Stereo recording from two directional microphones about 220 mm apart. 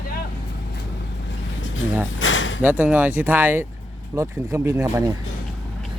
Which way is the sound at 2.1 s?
60° left (ahead or behind).